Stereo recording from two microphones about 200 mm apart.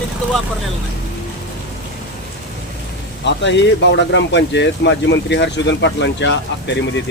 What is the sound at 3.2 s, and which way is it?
Speech, 60° left (ahead or behind).